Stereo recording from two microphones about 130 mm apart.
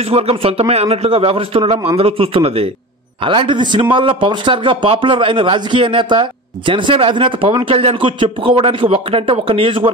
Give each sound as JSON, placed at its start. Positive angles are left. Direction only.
{"t": 0.1, "sound": "a man's voice", "side_deg": -45}
{"t": 3.3, "sound": "speech", "side_deg": -40}